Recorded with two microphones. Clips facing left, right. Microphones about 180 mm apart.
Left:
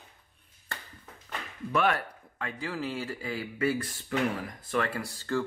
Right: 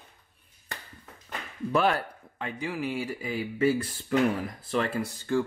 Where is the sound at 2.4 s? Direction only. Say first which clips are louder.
Right 2 dB; 20° right (ahead or behind).